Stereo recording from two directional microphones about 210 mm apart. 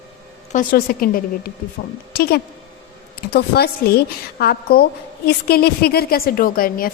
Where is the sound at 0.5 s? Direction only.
45° left (ahead or behind).